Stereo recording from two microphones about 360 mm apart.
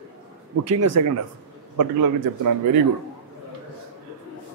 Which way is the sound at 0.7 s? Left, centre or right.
Right.